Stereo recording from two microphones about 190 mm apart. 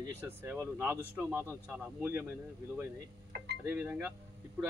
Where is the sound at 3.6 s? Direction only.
5° right (ahead or behind).